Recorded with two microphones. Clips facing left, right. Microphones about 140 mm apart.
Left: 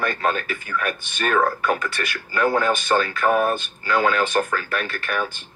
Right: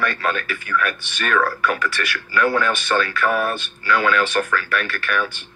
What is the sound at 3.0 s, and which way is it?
Speech, 25° left (ahead or behind).